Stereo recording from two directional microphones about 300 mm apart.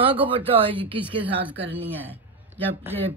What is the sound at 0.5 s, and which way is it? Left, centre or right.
Speech, centre.